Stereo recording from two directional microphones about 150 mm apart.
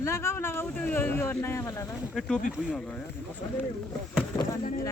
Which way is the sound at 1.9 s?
5° left (ahead or behind).